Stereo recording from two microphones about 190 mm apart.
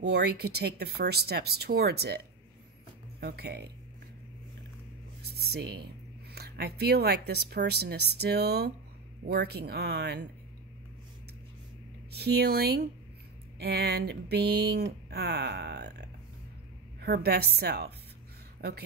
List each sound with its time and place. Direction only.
0.0 s speech: 60° right (ahead or behind)
5.2 s speech: 55° right (ahead or behind)
12.1 s speech: 60° right (ahead or behind)